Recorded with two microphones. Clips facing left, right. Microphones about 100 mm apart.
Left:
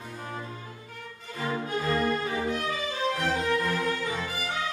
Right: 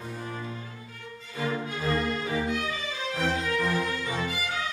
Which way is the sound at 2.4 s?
40° left (ahead or behind).